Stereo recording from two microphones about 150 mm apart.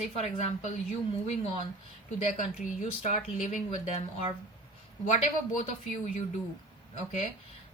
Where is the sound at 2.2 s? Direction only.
55° left (ahead or behind).